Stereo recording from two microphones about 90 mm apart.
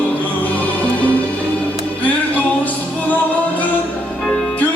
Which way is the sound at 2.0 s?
15° left (ahead or behind).